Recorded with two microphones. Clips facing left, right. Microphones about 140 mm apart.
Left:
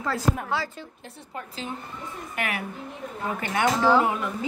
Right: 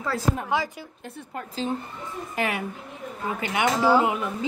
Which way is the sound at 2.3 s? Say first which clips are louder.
Right 3 dB; 25° right (ahead or behind).